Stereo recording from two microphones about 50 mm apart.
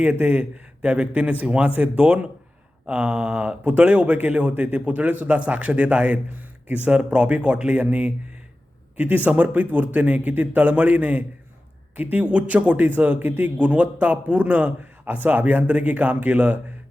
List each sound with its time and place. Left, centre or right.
0.0 s a man's voice: right
2.8 s a man's voice: right